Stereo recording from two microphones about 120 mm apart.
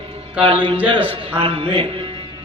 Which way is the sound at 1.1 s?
45° right (ahead or behind).